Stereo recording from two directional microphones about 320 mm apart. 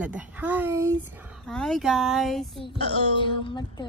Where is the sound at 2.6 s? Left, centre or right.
Centre.